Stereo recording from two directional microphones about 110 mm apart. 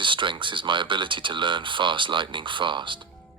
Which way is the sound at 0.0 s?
45° right (ahead or behind).